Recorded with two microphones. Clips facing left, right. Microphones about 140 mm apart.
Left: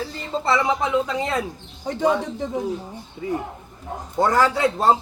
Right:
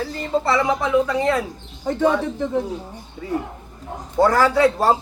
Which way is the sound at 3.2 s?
10° left (ahead or behind).